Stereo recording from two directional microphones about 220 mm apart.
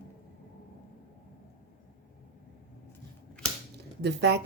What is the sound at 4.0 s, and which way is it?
Speech, 50° right (ahead or behind).